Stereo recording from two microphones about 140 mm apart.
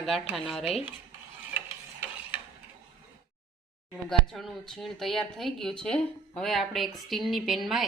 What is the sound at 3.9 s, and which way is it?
Speech, centre (ahead or behind).